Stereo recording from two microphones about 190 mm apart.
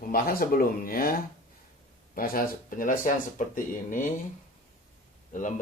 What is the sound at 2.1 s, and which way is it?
Speech, 50° left (ahead or behind).